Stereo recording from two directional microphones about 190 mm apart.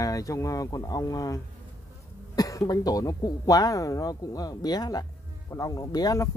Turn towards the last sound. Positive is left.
turn(degrees=20)  # may be behind; listen again after turning